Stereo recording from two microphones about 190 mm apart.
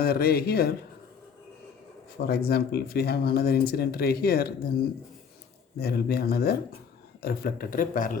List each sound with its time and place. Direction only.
0.0 s speech: 55° left (ahead or behind)
2.2 s speech: 55° left (ahead or behind)
5.8 s speech: 55° left (ahead or behind)